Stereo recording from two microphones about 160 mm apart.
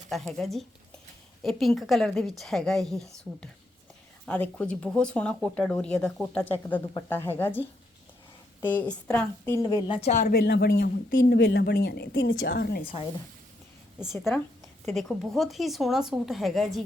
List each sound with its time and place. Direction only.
0.1 s a woman's voice: centre (ahead or behind)
8.6 s speech: 10° left (ahead or behind)
9.8 s speech: 30° left (ahead or behind)
10.1 s speech: 60° left (ahead or behind); by 12.8 s 85° left
12.8 s speech: 35° left (ahead or behind)
14.9 s a woman's voice: centre (ahead or behind)